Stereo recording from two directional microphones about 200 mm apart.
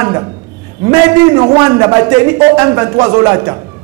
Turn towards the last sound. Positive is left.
turn(degrees=-15)  # may be behind; listen again after turning